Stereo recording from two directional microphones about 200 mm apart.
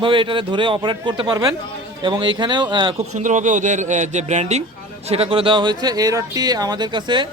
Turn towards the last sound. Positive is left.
turn(degrees=-25)  # may be behind; listen again after turning